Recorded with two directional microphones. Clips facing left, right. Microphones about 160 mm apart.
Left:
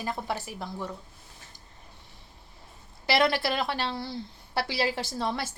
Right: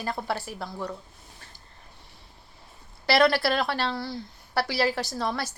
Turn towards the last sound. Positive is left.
turn(degrees=20)  # may be behind; listen again after turning